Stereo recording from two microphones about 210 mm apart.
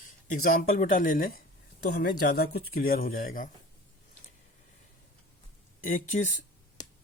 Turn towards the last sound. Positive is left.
turn(degrees=35)  # may be behind; listen again after turning